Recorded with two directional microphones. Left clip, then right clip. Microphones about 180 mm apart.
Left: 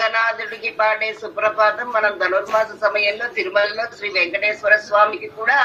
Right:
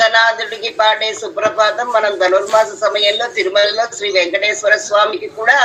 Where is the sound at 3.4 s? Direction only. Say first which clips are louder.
Right 5 dB; 15° left (ahead or behind).